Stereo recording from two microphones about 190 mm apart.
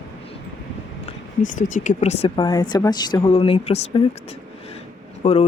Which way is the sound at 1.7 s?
40° left (ahead or behind).